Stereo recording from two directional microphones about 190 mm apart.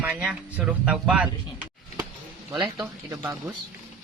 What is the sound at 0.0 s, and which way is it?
Speech, 5° right (ahead or behind).